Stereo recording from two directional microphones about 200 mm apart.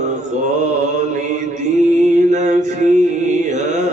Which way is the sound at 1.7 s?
35° right (ahead or behind).